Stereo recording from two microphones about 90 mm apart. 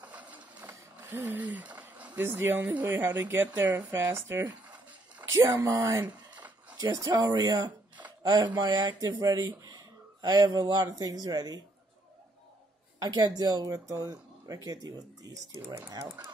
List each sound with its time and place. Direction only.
0.0 s printer: 15° right (ahead or behind)
0.7 s speech: 25° right (ahead or behind); by 7.1 s 40° right (ahead or behind)
7.1 s speech: 50° right (ahead or behind)
13.0 s speech: 45° right (ahead or behind)